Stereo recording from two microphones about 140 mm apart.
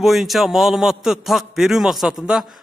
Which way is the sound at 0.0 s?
Centre (ahead or behind).